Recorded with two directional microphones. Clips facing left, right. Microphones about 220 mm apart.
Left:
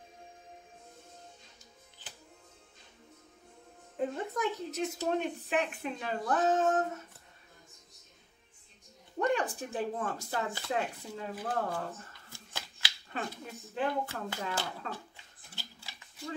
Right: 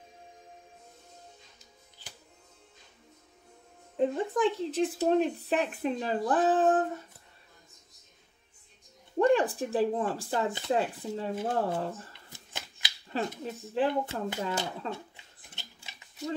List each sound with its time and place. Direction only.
4.0 s speech: 30° right (ahead or behind)
9.2 s speech: 35° right (ahead or behind)
10.5 s speech: 20° right (ahead or behind)
10.8 s speech: 30° right (ahead or behind)
13.4 s speech: 30° right (ahead or behind)
15.5 s a sound: 20° right (ahead or behind)